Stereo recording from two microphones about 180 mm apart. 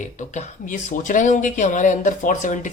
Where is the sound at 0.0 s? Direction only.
40° left (ahead or behind).